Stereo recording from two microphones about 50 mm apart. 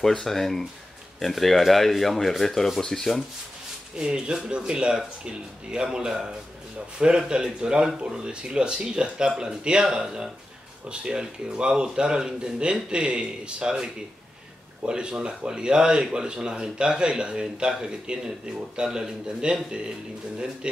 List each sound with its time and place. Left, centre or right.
0.0 s speech: centre
4.0 s speech: centre
14.9 s speech: centre